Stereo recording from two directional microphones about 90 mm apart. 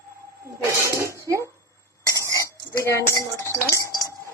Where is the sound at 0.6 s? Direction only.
35° right (ahead or behind).